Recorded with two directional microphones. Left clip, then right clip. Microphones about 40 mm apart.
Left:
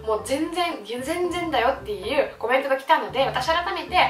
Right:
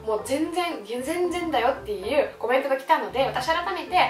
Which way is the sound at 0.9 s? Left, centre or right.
Centre.